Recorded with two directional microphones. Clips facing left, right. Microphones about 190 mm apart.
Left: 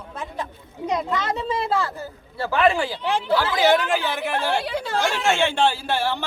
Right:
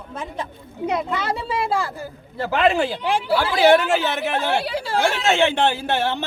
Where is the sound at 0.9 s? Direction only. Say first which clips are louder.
Even; 5° right (ahead or behind); by 3.1 s 20° right (ahead or behind).